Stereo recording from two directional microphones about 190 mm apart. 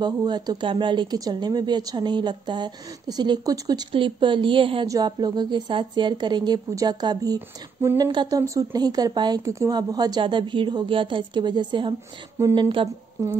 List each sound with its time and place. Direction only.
0.0 s speech: 20° right (ahead or behind)